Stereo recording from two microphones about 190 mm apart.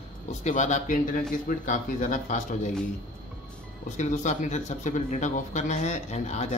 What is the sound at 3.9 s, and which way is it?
Speech, 40° left (ahead or behind).